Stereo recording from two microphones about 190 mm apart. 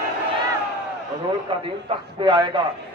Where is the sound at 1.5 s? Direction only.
25° right (ahead or behind).